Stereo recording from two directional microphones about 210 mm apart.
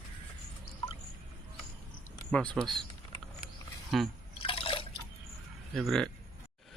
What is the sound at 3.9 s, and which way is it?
Speech, centre (ahead or behind).